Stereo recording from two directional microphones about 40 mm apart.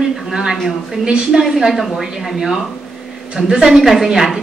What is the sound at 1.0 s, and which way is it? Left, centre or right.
Speech, right.